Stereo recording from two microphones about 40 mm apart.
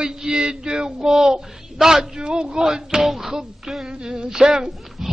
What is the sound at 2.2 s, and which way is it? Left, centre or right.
Speech, right.